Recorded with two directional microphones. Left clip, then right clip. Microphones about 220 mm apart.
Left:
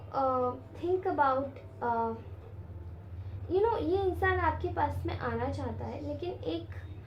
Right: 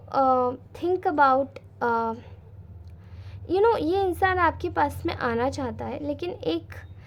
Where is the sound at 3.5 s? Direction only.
45° right (ahead or behind).